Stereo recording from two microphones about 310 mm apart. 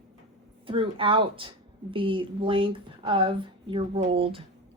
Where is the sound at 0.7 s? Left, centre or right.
Centre.